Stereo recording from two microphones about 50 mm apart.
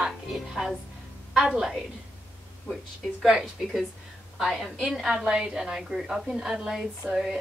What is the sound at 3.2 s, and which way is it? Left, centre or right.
A woman's voice, centre.